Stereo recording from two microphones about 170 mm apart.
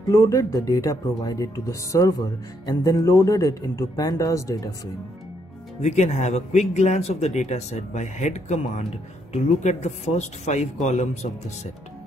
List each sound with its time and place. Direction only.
0.1 s speech: 20° left (ahead or behind)
5.8 s speech: 40° left (ahead or behind)